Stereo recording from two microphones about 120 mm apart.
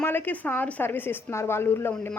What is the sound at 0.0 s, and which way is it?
A woman's voice, 15° left (ahead or behind).